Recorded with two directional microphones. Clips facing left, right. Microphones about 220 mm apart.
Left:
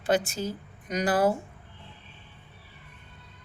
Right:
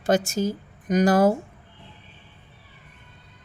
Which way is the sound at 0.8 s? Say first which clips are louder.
Right 6 dB; 45° right (ahead or behind).